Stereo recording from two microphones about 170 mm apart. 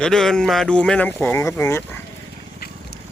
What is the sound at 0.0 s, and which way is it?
Speech, 5° left (ahead or behind).